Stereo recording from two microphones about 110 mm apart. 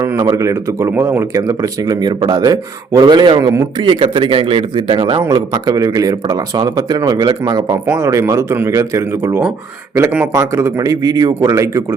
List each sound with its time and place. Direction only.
0.0 s a man's voice: 30° right (ahead or behind); by 5.2 s 50° right (ahead or behind)
5.3 s speech: 35° right (ahead or behind)